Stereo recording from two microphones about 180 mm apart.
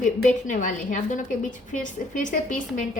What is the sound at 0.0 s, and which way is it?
A woman's voice, 45° left (ahead or behind).